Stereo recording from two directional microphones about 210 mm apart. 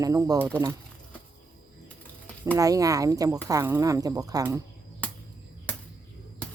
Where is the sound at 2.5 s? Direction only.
15° right (ahead or behind).